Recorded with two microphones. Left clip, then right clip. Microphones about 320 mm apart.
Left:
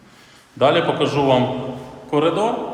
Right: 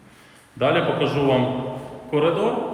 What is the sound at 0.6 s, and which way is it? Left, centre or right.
A man's voice, centre.